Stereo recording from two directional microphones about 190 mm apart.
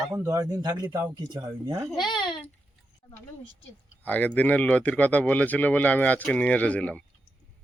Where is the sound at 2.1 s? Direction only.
25° left (ahead or behind).